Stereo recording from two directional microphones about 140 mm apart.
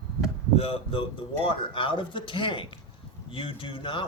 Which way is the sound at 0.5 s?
45° left (ahead or behind).